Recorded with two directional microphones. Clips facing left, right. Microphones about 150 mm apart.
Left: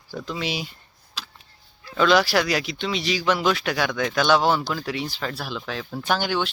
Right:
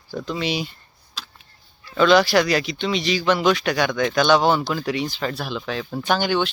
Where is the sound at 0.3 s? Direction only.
5° left (ahead or behind).